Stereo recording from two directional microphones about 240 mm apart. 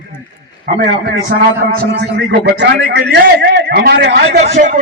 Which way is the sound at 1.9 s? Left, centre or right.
Right.